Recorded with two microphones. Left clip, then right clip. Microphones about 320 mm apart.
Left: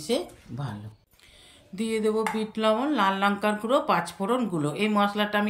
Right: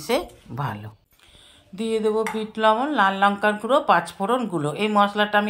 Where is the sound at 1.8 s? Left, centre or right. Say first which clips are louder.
Right 4 dB; centre.